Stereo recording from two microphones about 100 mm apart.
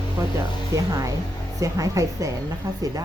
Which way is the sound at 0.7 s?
35° right (ahead or behind).